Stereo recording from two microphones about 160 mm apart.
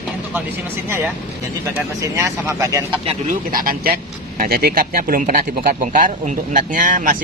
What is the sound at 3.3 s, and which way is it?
Speech, 60° right (ahead or behind).